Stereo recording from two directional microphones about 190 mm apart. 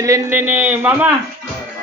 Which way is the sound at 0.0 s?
15° right (ahead or behind).